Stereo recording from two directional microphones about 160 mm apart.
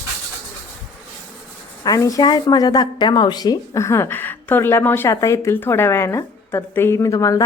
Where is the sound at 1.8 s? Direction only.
20° left (ahead or behind).